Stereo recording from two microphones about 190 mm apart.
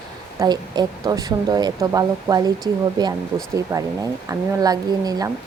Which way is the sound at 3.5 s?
15° right (ahead or behind).